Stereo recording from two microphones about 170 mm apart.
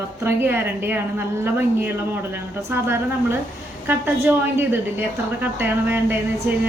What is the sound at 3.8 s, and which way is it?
A woman's voice, 10° right (ahead or behind).